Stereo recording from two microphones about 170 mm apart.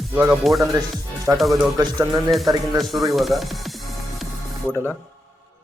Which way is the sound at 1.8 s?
20° right (ahead or behind).